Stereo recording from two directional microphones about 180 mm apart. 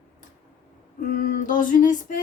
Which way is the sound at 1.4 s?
50° left (ahead or behind).